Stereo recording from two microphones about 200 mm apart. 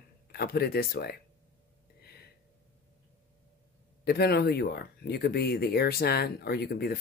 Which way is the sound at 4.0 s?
50° left (ahead or behind).